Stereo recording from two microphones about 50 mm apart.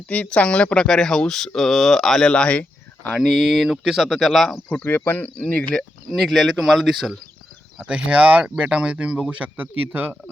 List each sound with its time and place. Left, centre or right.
0.1 s speech: left; by 2.3 s centre
2.3 s speech: left
3.2 s speech: centre
4.8 s speech: left
5.7 s speech: centre
7.9 s speech: right
9.3 s speech: right